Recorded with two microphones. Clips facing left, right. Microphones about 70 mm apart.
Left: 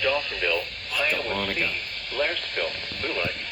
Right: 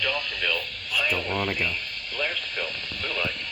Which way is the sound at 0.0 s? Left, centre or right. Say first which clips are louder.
Left 3 dB; left.